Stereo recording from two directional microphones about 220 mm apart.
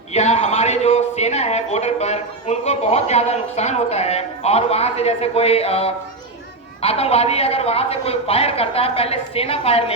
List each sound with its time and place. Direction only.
0.1 s a man's voice: 30° left (ahead or behind)